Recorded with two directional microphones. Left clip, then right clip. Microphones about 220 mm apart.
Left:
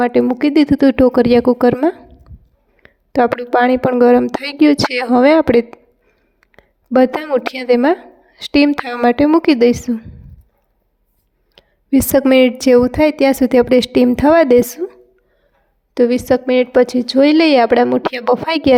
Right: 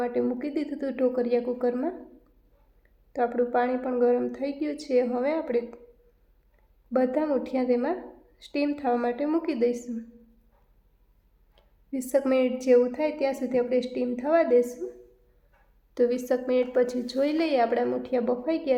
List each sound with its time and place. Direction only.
0.0 s speech: 40° left (ahead or behind)
6.9 s speech: 40° left (ahead or behind)
11.5 s speech: 45° left (ahead or behind)
16.0 s speech: 35° left (ahead or behind)